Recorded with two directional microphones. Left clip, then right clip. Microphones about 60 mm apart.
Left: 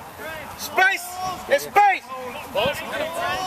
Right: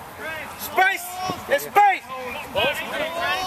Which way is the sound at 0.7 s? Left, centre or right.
Left.